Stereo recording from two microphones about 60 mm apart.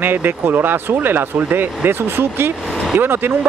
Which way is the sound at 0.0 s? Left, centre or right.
Right.